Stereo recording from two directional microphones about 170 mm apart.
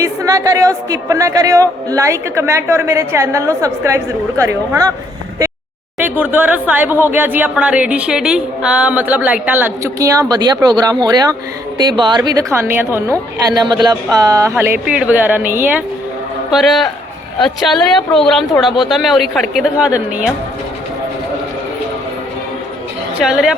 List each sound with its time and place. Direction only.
0.0 s speech: 20° right (ahead or behind)
6.0 s a woman's voice: 10° right (ahead or behind)
13.6 s speech: 25° right (ahead or behind)
16.5 s speech: centre (ahead or behind)
23.2 s speech: 5° right (ahead or behind)